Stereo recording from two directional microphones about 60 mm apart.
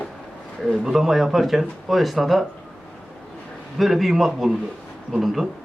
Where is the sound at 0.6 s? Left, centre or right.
Centre.